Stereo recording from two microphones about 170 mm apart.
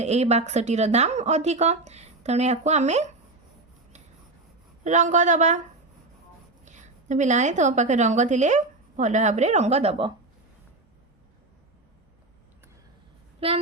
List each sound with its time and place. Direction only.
0.0 s a woman's voice: 40° right (ahead or behind)
4.8 s a woman's voice: 45° right (ahead or behind)
6.7 s a woman's voice: 45° right (ahead or behind)
13.4 s a woman's voice: 35° right (ahead or behind)